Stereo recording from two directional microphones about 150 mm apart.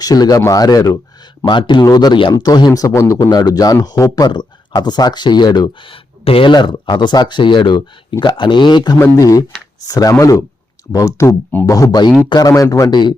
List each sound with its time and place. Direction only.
0.0 s speech: 25° left (ahead or behind)